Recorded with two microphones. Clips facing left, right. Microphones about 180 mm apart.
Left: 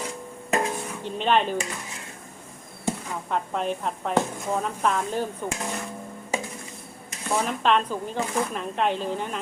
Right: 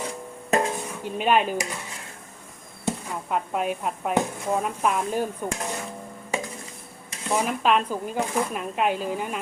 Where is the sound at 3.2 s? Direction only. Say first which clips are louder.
Right 1 dB; 10° right (ahead or behind).